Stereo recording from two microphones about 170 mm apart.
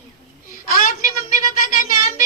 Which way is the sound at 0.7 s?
55° left (ahead or behind).